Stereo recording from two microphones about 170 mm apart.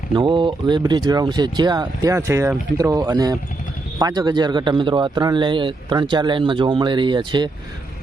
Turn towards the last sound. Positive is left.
turn(degrees=-25)  # may be behind; listen again after turning